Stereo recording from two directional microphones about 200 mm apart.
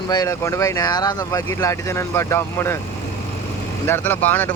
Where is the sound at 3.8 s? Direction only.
10° left (ahead or behind).